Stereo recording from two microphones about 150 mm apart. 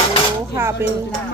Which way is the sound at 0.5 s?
15° right (ahead or behind).